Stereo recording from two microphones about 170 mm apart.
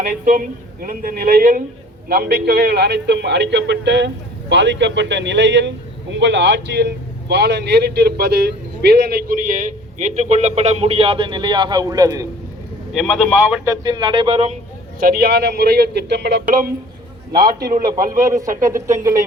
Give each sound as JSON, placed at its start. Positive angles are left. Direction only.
{"t": 0.0, "sound": "a man's voice", "side_deg": -50}
{"t": 12.9, "sound": "speech", "side_deg": 0}
{"t": 13.7, "sound": "speech", "side_deg": -25}
{"t": 15.0, "sound": "a man's voice", "side_deg": -60}
{"t": 17.3, "sound": "a man's voice", "side_deg": -25}